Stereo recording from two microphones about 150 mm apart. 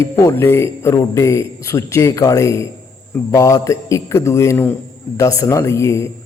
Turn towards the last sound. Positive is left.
turn(degrees=20)  # may be behind; listen again after turning